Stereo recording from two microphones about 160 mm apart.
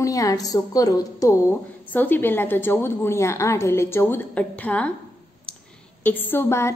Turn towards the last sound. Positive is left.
turn(degrees=15)  # may be behind; listen again after turning